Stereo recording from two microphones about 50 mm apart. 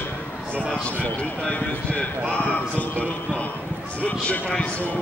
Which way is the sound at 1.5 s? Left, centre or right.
Left.